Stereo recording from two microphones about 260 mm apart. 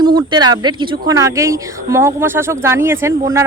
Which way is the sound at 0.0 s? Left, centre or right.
Centre.